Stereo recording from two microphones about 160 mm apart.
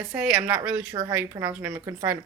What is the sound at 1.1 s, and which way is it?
Speech, 15° right (ahead or behind).